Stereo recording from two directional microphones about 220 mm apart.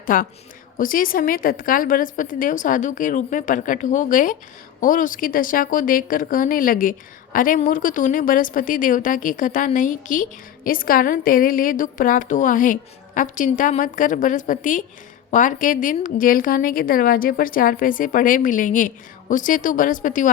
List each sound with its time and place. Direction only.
0.0 s a woman's voice: 40° left (ahead or behind)